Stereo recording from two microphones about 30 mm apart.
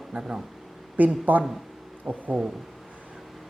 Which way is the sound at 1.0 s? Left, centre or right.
Right.